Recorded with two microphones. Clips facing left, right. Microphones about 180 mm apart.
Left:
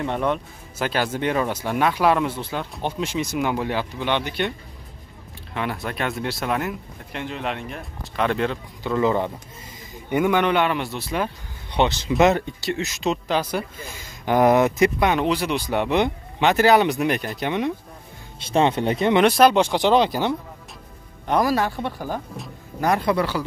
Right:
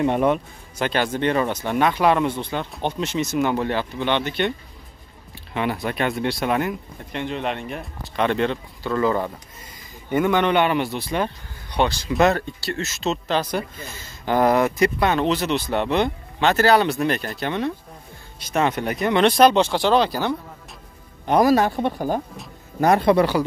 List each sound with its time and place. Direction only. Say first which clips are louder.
0.0 s speech: right 4 dB; 15° right (ahead or behind)
0.7 s speech: right 1 dB; 5° left (ahead or behind)
8.8 s speech: even; 15° left (ahead or behind)
11.7 s speech: left 1 dB; 20° left (ahead or behind)
18.4 s speech: left 2 dB; 30° left (ahead or behind)
19.2 s speech: right 3 dB; 10° left (ahead or behind)
21.4 s speech: right 5 dB; 20° right (ahead or behind)